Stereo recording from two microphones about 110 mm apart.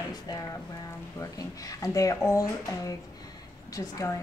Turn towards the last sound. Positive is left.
turn(degrees=30)  # may be behind; listen again after turning